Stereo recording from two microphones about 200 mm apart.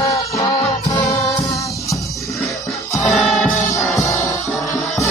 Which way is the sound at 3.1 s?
Centre (ahead or behind).